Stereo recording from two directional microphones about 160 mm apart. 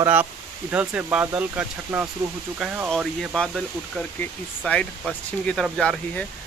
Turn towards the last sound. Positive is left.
turn(degrees=5)  # may be behind; listen again after turning